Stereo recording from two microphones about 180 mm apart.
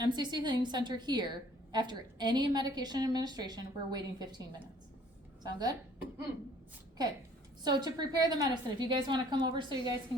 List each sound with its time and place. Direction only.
0.0 s a woman's voice: 25° right (ahead or behind)
5.4 s speech: 20° right (ahead or behind)
7.6 s a woman's voice: 25° right (ahead or behind)